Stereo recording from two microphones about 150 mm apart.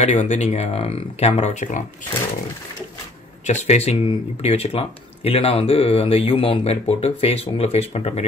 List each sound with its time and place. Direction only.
0.0 s speech: 50° left (ahead or behind)
3.4 s speech: 45° left (ahead or behind)